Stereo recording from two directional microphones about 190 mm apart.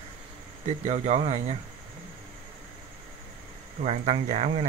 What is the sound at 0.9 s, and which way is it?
Speech, 35° right (ahead or behind).